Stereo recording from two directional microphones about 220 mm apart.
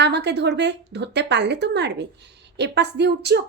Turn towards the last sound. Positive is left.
turn(degrees=-50)  # may be behind; listen again after turning